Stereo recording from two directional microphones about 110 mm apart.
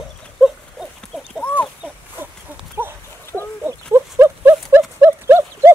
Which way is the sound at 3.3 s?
25° right (ahead or behind).